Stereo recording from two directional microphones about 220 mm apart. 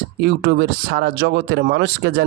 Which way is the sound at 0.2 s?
50° right (ahead or behind).